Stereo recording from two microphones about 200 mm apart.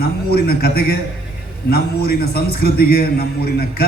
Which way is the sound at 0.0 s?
50° left (ahead or behind).